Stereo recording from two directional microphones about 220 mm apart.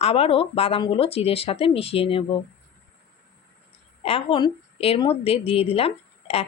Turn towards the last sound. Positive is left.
turn(degrees=25)  # may be behind; listen again after turning